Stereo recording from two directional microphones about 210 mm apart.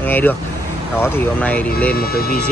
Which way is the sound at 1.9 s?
45° left (ahead or behind).